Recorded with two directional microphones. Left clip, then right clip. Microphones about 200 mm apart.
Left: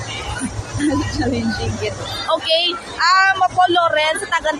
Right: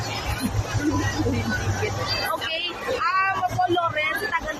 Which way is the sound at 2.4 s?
40° left (ahead or behind).